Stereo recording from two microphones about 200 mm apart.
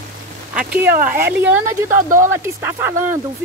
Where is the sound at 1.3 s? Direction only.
10° right (ahead or behind).